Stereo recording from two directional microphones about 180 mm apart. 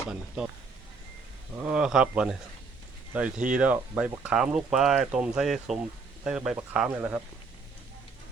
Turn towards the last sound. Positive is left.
turn(degrees=-10)  # may be behind; listen again after turning